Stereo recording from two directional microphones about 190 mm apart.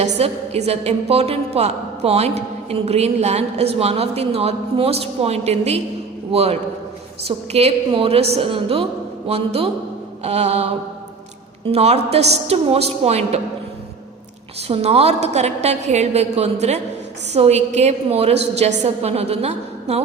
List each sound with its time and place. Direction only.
0.0 s a woman's voice: 35° right (ahead or behind)
11.7 s a woman's voice: 35° right (ahead or behind)
14.7 s a woman's voice: 35° right (ahead or behind)